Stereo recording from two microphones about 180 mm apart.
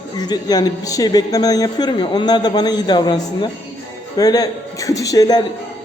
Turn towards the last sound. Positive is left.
turn(degrees=20)  # may be behind; listen again after turning